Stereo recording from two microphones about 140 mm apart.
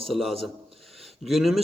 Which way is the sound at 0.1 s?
Centre (ahead or behind).